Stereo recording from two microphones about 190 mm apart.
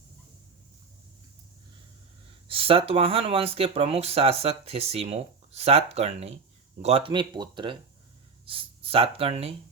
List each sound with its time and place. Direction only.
2.5 s speech: 30° right (ahead or behind)